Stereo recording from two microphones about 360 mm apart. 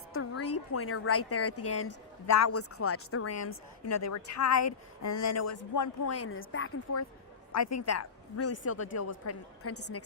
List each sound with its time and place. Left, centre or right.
0.1 s a woman's voice: left
7.5 s a woman's voice: left